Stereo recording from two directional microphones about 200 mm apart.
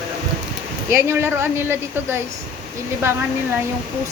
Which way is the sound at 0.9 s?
10° right (ahead or behind).